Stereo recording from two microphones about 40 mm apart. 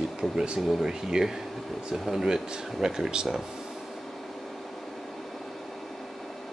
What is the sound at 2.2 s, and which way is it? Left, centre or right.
Speech, centre.